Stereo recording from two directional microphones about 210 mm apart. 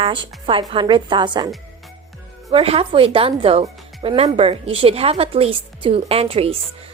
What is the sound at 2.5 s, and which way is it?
Speech, 25° right (ahead or behind).